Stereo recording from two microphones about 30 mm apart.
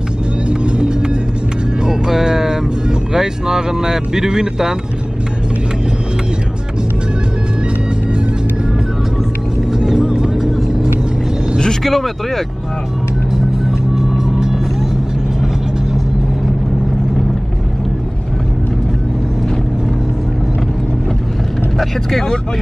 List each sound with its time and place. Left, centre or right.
0.5 s music: right
1.9 s music: centre
3.1 s speech: right
9.7 s music: centre
10.4 s vehicle: centre
11.8 s vehicle: centre
13.9 s vehicle: centre